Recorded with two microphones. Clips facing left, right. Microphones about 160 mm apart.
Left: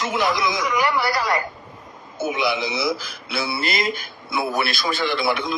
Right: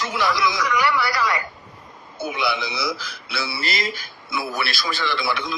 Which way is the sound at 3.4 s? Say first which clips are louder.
Left 3 dB; 50° left (ahead or behind).